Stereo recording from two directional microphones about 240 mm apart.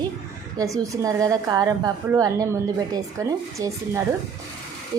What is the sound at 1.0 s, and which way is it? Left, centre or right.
A woman's voice, centre.